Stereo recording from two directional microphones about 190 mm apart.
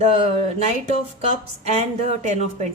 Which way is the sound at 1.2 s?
35° right (ahead or behind).